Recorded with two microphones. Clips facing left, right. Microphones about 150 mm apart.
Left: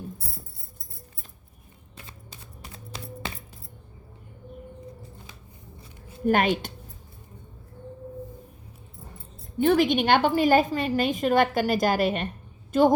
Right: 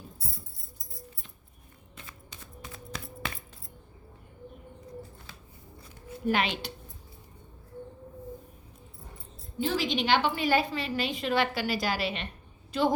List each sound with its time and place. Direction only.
2.7 s music: 25° left (ahead or behind)
6.2 s a woman's voice: 50° left (ahead or behind)
9.6 s a woman's voice: 60° left (ahead or behind)